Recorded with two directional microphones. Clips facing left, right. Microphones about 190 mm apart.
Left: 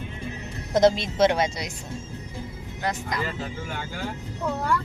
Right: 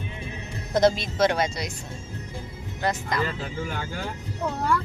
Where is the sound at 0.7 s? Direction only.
20° left (ahead or behind).